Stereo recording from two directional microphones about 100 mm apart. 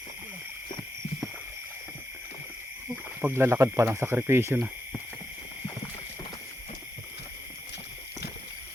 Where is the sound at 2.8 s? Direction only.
20° right (ahead or behind).